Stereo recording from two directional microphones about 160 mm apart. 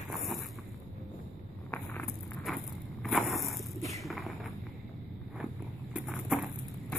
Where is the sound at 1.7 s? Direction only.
10° left (ahead or behind).